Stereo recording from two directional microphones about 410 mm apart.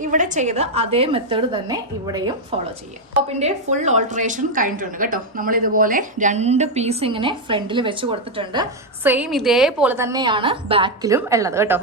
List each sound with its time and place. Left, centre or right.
0.0 s a woman's voice: centre